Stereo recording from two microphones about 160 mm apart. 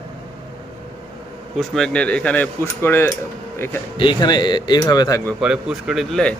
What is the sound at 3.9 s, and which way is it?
Speech, 30° left (ahead or behind).